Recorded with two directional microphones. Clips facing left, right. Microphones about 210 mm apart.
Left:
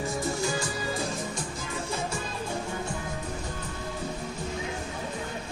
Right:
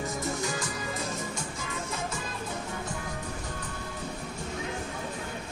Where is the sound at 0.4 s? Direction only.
30° left (ahead or behind).